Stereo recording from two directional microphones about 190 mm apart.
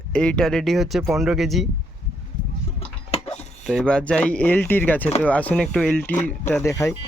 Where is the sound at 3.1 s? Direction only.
30° left (ahead or behind).